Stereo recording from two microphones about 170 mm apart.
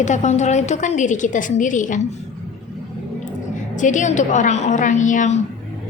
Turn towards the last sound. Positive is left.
turn(degrees=45)  # may be behind; listen again after turning